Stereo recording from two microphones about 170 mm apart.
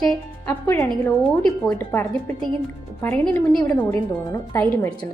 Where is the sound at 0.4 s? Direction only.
15° left (ahead or behind).